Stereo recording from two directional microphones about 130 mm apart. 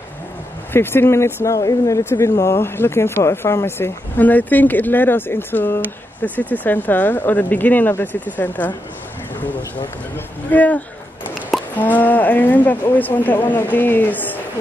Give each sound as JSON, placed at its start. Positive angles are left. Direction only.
{"t": 0.7, "sound": "speech", "side_deg": 20}
{"t": 10.1, "sound": "speech", "side_deg": 10}